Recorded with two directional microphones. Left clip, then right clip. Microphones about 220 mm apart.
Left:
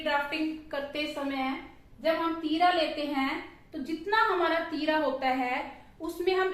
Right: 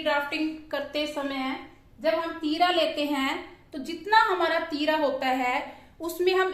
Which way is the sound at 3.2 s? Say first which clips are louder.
Right 3 dB; 50° right (ahead or behind).